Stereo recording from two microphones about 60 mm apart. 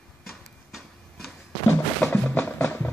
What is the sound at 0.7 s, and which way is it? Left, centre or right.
Tick-tock, centre.